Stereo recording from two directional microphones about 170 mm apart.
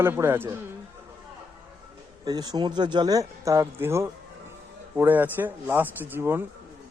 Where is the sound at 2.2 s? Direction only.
25° right (ahead or behind).